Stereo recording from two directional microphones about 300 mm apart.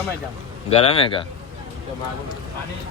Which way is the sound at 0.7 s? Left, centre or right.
Centre.